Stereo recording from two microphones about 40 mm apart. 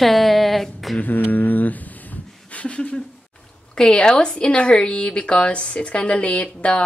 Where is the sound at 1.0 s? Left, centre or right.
Left.